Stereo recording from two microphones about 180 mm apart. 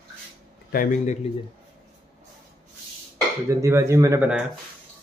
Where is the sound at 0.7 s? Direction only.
50° left (ahead or behind).